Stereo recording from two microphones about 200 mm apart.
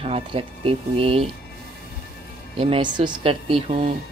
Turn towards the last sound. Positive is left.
turn(degrees=-30)  # may be behind; listen again after turning